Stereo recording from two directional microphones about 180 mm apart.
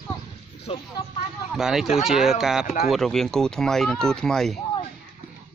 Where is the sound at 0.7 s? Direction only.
30° left (ahead or behind).